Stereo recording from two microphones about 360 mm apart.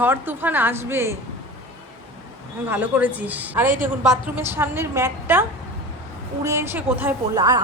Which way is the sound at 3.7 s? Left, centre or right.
Right.